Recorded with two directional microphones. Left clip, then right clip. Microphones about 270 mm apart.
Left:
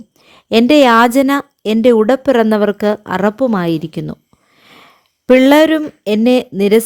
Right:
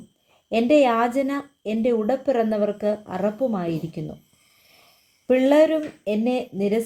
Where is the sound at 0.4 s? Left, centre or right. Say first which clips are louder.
Left 9 dB; left.